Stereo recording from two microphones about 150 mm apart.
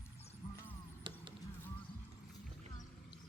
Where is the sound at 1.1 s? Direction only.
30° right (ahead or behind).